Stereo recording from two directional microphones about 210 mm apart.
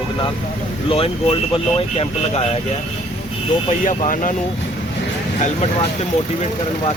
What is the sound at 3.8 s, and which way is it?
Speech, 40° left (ahead or behind).